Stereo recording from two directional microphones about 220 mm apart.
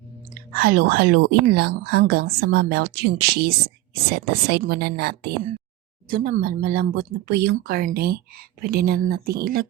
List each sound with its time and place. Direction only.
0.5 s a woman's voice: 45° right (ahead or behind)